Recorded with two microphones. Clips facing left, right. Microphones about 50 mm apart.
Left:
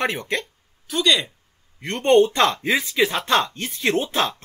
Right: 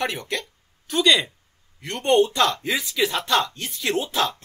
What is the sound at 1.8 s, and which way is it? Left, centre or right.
Speech, left.